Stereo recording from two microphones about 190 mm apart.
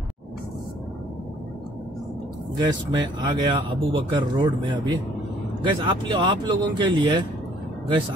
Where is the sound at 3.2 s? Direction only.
20° right (ahead or behind).